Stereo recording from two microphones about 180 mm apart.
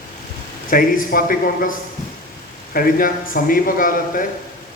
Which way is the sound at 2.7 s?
55° left (ahead or behind).